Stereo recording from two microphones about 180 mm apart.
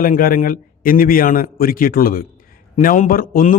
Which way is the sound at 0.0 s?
50° left (ahead or behind).